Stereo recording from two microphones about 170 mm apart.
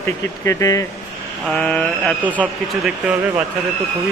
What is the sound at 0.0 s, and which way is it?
Speech, 15° left (ahead or behind).